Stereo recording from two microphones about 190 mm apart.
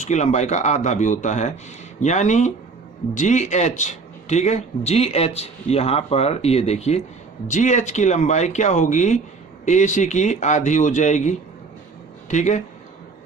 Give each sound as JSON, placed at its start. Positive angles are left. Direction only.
{"t": 0.0, "sound": "a man's voice", "side_deg": 40}